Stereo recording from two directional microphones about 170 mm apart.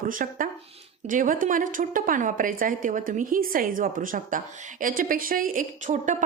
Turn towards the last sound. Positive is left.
turn(degrees=-50)  # may be behind; listen again after turning